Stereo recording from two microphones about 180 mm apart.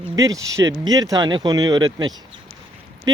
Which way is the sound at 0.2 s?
20° right (ahead or behind).